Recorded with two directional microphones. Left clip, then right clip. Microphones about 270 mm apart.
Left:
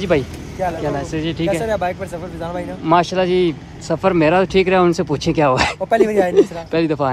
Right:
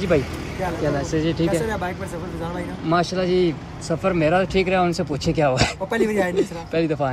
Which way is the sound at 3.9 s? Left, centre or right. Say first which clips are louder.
Left 5 dB; centre.